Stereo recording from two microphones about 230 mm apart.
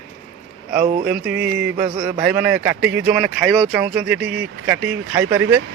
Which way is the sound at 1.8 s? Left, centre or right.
Right.